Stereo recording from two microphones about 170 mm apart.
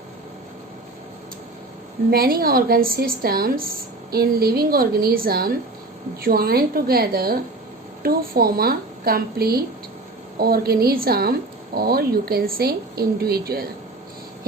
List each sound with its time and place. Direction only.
2.0 s speech: 65° right (ahead or behind)